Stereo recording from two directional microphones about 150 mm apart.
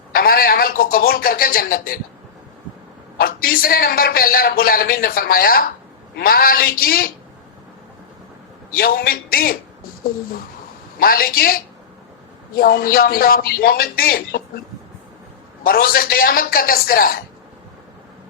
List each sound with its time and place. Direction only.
0.1 s speech: 80° left
3.2 s a man's voice: 80° left
8.7 s a man's voice: 80° left
11.0 s a man's voice: 80° left
15.6 s a man's voice: 80° left